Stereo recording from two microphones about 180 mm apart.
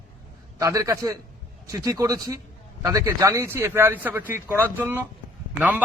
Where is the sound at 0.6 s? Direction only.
20° right (ahead or behind).